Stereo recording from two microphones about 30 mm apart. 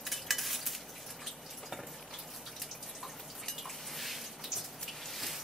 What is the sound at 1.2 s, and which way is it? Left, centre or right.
Drip, centre.